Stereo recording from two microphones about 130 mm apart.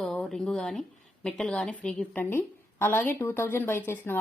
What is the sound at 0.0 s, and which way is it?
A woman's voice, 5° left (ahead or behind).